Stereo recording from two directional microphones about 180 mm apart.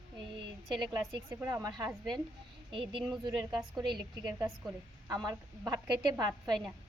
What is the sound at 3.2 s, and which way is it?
Speech, 20° right (ahead or behind).